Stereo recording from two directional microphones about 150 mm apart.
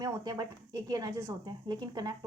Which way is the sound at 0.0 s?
25° right (ahead or behind).